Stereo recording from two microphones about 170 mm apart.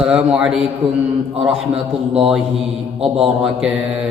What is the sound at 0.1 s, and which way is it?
Mantra, 5° right (ahead or behind).